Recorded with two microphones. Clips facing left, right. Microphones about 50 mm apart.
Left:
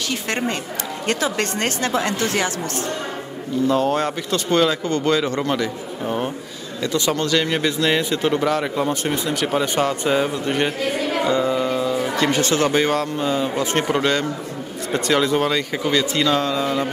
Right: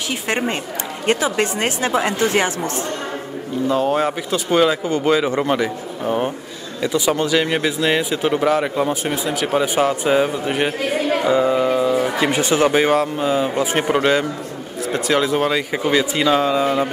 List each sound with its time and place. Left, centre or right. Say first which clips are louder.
0.1 s speech: right 3 dB; centre
3.6 s speech: right 1 dB; centre
11.2 s music: right 4 dB; centre
12.2 s speech: left 1 dB; centre